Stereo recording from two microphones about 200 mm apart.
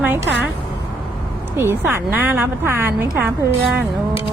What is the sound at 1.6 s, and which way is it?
A woman's voice, 10° right (ahead or behind).